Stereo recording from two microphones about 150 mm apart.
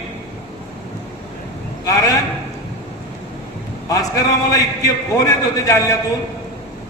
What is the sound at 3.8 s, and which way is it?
A man's voice, 25° left (ahead or behind).